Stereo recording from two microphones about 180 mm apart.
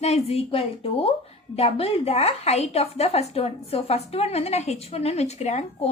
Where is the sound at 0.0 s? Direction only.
35° left (ahead or behind).